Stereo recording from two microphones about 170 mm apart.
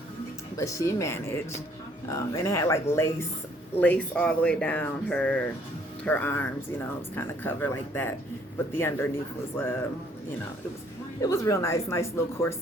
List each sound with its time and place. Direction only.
0.5 s speech: 20° left (ahead or behind)
11.2 s speech: 20° left (ahead or behind)